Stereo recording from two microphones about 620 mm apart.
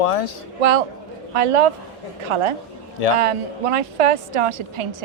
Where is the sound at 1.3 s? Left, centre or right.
Right.